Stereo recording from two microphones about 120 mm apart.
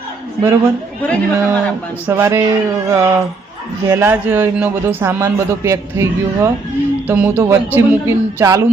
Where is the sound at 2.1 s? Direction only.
20° right (ahead or behind).